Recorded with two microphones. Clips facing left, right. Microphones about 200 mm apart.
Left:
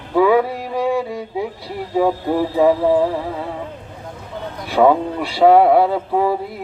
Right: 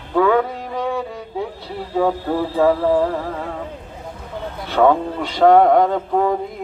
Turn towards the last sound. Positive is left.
turn(degrees=5)  # may be behind; listen again after turning